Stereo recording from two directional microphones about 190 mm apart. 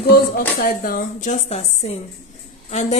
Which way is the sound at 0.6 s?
50° left (ahead or behind).